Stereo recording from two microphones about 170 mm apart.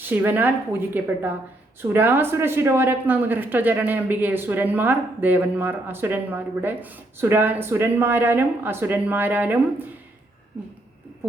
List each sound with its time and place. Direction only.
0.0 s speech: 10° right (ahead or behind)